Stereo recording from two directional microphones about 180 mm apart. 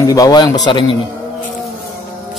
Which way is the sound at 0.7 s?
25° left (ahead or behind).